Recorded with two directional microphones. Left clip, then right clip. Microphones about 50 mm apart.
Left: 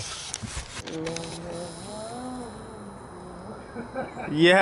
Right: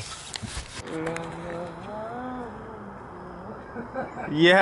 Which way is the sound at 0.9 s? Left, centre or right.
Right.